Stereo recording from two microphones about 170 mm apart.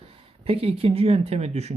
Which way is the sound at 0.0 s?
35° right (ahead or behind).